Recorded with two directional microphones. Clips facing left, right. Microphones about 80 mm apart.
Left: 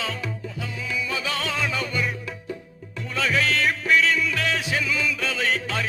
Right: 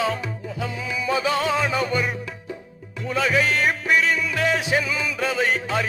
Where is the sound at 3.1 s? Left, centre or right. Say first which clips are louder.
Right 3 dB; centre.